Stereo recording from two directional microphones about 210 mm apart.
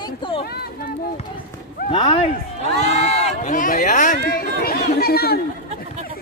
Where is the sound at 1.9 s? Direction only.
25° left (ahead or behind); by 5.4 s 50° left (ahead or behind).